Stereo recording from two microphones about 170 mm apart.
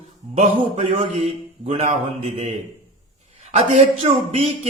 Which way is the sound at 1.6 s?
40° right (ahead or behind).